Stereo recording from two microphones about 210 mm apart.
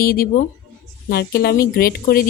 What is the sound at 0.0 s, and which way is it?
A woman's voice, 45° left (ahead or behind).